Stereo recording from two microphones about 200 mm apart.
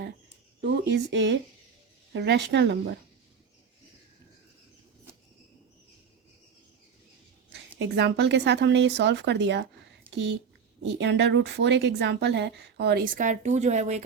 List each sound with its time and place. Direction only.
0.6 s speech: 60° right (ahead or behind)
7.8 s speech: 60° right (ahead or behind); by 14.0 s 35° right (ahead or behind)